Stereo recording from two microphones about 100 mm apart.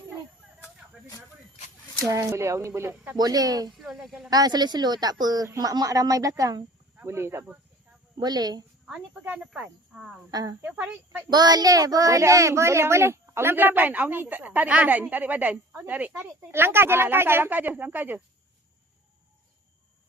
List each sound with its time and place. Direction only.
0.6 s vehicle: 30° left (ahead or behind)
2.0 s a child's voice: 30° right (ahead or behind)
3.2 s a woman's voice: 40° right (ahead or behind)
3.8 s speech: centre (ahead or behind)
4.3 s a woman's voice: 40° right (ahead or behind)
7.0 s a child's voice: 25° right (ahead or behind)
8.2 s a woman's voice: 40° right (ahead or behind)
8.9 s speech: 10° right (ahead or behind)
10.3 s a woman's voice: 35° right (ahead or behind)
10.6 s speech: 10° right (ahead or behind)
11.3 s a child's voice: 45° right (ahead or behind); by 18.2 s 20° right (ahead or behind)